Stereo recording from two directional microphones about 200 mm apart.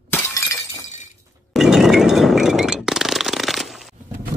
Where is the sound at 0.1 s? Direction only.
15° left (ahead or behind).